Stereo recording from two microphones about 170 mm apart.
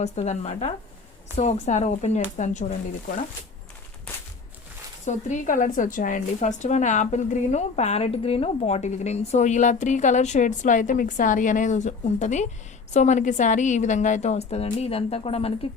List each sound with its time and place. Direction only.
0.0 s a woman's voice: 40° left (ahead or behind)
5.0 s a woman's voice: 50° left (ahead or behind)